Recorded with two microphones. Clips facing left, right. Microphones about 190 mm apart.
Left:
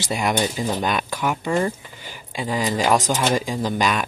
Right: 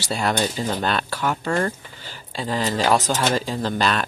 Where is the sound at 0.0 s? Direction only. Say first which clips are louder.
Left 1 dB; 15° left (ahead or behind).